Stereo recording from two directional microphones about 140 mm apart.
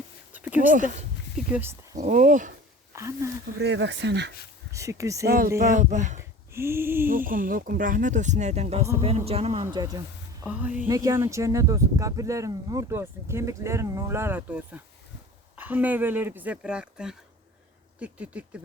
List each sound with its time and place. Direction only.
0.3 s a sound: 10° right (ahead or behind)
0.6 s speech: 70° right (ahead or behind)
1.4 s speech: 10° right (ahead or behind)
2.0 s speech: 60° right (ahead or behind)
2.9 s speech: 20° right (ahead or behind)
4.7 s speech: 20° right (ahead or behind)
5.5 s speech: 65° right (ahead or behind)
6.5 s speech: 20° right (ahead or behind)
7.3 s speech: 80° right; by 9.6 s 50° right (ahead or behind)
9.7 s speech: 30° right (ahead or behind)
10.4 s speech: 10° right (ahead or behind)